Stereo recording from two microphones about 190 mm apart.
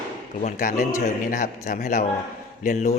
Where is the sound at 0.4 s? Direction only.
40° left (ahead or behind).